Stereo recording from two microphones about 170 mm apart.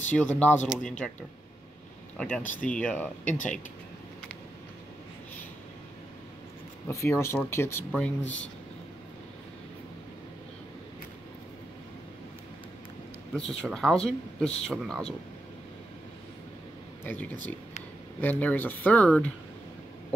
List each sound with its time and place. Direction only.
0.1 s speech: 10° left (ahead or behind)
2.1 s speech: 5° left (ahead or behind)
6.9 s speech: 15° left (ahead or behind)
13.4 s speech: centre (ahead or behind)
17.0 s speech: 10° left (ahead or behind)